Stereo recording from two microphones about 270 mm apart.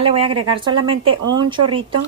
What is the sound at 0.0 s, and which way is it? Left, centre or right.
Speech, right.